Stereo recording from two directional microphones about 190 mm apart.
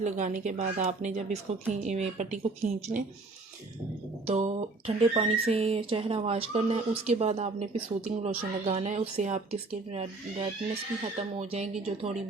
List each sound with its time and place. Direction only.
0.0 s speech: 40° right (ahead or behind)
4.3 s speech: 35° right (ahead or behind)